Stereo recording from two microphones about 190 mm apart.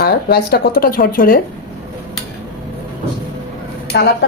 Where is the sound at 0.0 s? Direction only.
55° left (ahead or behind).